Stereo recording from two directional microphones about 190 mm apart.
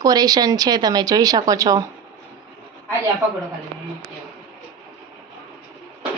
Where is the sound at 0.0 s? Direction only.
20° right (ahead or behind).